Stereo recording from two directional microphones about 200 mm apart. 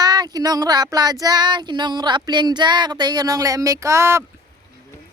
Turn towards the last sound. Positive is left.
turn(degrees=-15)  # may be behind; listen again after turning